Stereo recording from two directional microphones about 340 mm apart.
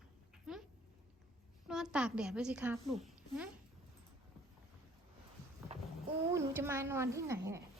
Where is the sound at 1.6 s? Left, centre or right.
Centre.